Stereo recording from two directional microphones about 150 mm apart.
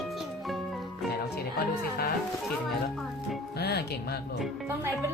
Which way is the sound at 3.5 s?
90° left.